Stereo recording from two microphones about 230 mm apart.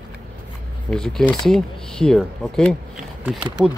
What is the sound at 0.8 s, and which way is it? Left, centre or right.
Speech, centre.